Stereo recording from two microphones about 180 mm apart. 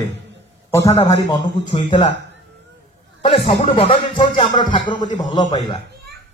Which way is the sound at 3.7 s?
30° left (ahead or behind).